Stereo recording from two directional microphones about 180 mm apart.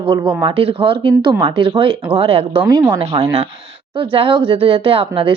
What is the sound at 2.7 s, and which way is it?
Speech, 20° right (ahead or behind).